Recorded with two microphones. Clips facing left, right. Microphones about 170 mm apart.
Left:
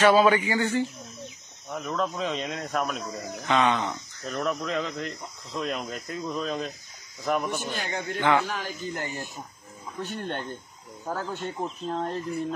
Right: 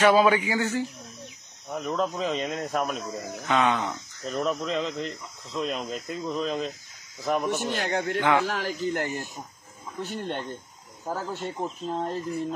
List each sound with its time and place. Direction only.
0.0 s speech: 10° right (ahead or behind)
1.9 s speech: 5° right (ahead or behind)
7.7 s a man's voice: 85° right
8.2 s speech: 5° right (ahead or behind)
8.5 s a man's voice: 80° right
10.0 s speech: centre (ahead or behind)